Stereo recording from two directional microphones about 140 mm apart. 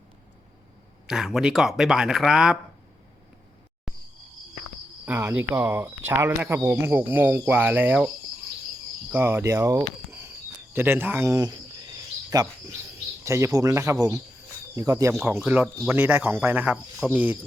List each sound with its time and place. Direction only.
1.0 s speech: 5° right (ahead or behind)
5.0 s speech: 15° right (ahead or behind)
9.1 s speech: 15° right (ahead or behind)
15.9 s speech: 10° right (ahead or behind)